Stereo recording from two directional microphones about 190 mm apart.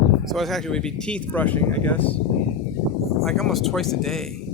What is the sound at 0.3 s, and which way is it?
Speech, centre (ahead or behind).